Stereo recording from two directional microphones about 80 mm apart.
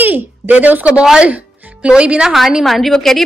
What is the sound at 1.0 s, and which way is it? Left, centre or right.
A woman's voice, centre.